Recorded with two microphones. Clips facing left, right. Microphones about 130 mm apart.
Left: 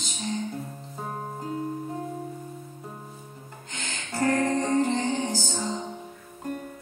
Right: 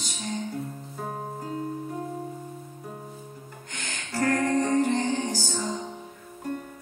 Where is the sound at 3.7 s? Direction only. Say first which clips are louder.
Even; 25° left (ahead or behind).